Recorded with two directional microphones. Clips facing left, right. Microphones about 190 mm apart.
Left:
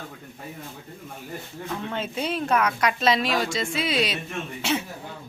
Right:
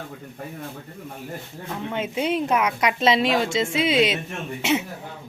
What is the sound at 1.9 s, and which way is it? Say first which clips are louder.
A woman's voice: right 6 dB; 15° right (ahead or behind).